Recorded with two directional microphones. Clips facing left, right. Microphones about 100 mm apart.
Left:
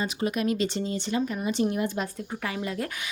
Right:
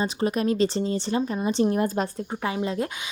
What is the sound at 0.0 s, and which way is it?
Speech, 35° right (ahead or behind).